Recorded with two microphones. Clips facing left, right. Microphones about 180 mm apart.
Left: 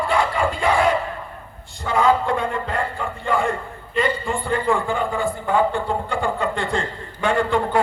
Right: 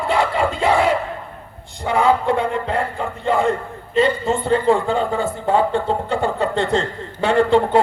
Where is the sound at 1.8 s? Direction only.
20° right (ahead or behind).